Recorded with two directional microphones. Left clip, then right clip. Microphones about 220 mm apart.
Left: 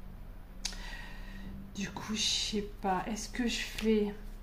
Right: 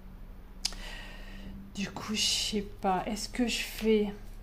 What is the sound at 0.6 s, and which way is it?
Speech, 40° right (ahead or behind).